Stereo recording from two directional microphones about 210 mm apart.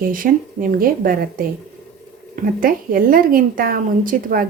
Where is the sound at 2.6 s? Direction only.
40° right (ahead or behind).